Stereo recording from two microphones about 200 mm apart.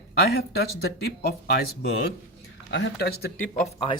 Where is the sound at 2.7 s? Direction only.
55° left (ahead or behind).